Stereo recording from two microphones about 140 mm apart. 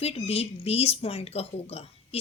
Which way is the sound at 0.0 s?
45° left (ahead or behind).